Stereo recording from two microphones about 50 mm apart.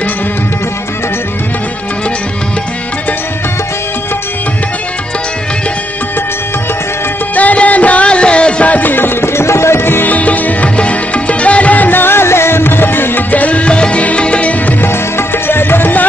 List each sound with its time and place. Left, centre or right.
7.3 s music: left
8.7 s music: left
10.0 s music: left
13.3 s music: left
14.8 s music: left